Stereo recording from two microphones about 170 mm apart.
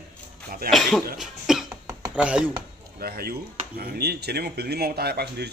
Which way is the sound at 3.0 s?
65° right (ahead or behind).